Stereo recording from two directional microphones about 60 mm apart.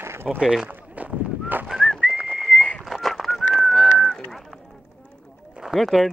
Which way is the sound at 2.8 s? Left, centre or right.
Centre.